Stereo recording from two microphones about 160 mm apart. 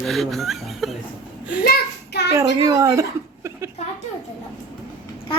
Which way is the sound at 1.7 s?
90° left.